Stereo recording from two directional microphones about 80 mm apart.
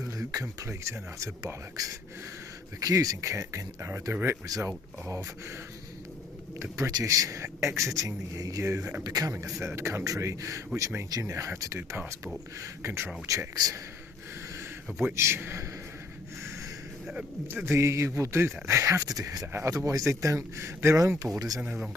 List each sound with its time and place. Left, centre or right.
0.0 s a sound: right
0.4 s speech: right
1.8 s speech: right
6.6 s speech: right
9.0 s speech: right
9.3 s speech: right
15.0 s speech: right
17.5 s speech: right
19.5 s speech: right
21.3 s speech: right